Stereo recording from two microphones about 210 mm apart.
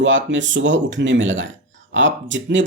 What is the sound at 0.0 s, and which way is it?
Speech, 60° right (ahead or behind).